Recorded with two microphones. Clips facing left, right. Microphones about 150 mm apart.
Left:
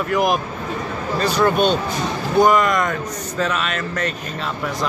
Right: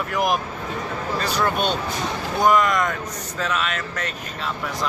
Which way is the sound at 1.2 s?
5° right (ahead or behind).